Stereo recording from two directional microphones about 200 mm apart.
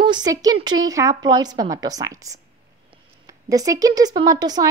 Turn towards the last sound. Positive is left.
turn(degrees=-20)  # may be behind; listen again after turning